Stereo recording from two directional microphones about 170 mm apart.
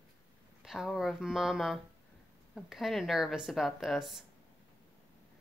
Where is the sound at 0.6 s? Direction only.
Centre (ahead or behind).